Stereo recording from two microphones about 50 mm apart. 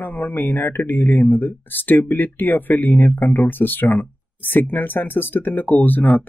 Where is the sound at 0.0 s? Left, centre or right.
Left.